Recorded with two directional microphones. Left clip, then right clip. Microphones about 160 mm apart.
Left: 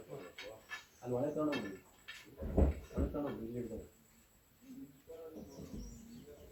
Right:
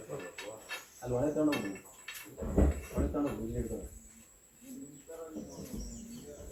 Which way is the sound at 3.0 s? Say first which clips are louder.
Right 5 dB; 20° right (ahead or behind).